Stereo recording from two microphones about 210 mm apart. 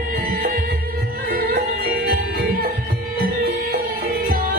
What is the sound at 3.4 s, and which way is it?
Music, 45° right (ahead or behind).